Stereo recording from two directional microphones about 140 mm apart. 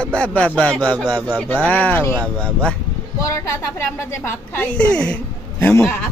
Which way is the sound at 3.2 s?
20° left (ahead or behind).